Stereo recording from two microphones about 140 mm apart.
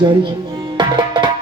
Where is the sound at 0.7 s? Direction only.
35° right (ahead or behind).